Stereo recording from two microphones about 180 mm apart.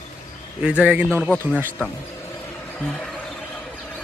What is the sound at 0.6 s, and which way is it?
Speech, 5° right (ahead or behind).